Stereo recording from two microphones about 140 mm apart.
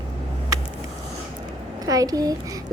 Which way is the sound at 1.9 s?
25° right (ahead or behind).